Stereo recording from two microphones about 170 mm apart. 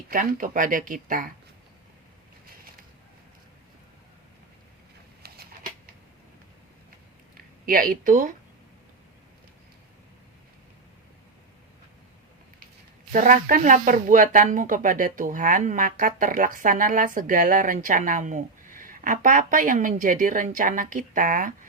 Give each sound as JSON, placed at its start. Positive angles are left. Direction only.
{"t": 0.1, "sound": "speech", "side_deg": -55}
{"t": 5.2, "sound": "a sound", "side_deg": -65}
{"t": 7.6, "sound": "speech", "side_deg": -55}
{"t": 13.1, "sound": "speech", "side_deg": -50}